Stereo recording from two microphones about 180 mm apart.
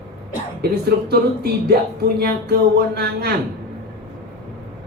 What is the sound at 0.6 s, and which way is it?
Speech, 60° right (ahead or behind).